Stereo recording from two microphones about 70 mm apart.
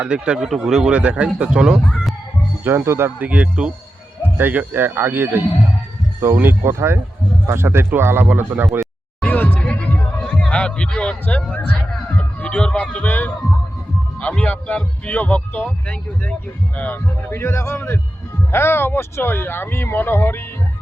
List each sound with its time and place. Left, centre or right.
0.0 s speech: centre
2.6 s speech: right
3.2 s speech: centre
4.4 s speech: right
9.2 s music: left
12.1 s speech: centre; by 20.4 s left